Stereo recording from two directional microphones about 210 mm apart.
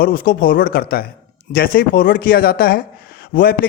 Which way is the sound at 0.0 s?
45° left (ahead or behind).